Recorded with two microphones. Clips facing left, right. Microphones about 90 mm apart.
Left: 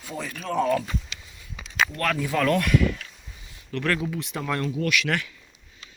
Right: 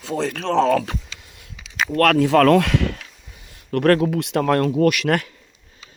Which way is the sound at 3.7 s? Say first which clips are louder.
Right 10 dB; 50° right (ahead or behind).